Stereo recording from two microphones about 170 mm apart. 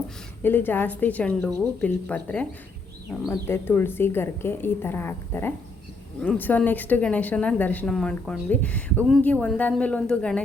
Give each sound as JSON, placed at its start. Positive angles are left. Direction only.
{"t": 0.4, "sound": "a woman's voice", "side_deg": 10}
{"t": 1.5, "sound": "speech", "side_deg": -20}
{"t": 1.8, "sound": "a woman's voice", "side_deg": 10}